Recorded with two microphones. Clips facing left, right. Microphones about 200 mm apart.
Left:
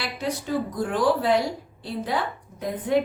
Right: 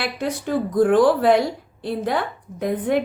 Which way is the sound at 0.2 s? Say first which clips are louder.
Right 2 dB; 55° right (ahead or behind).